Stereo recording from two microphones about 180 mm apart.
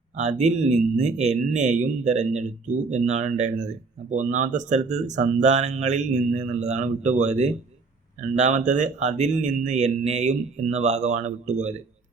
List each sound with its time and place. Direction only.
0.2 s speech: 40° right (ahead or behind)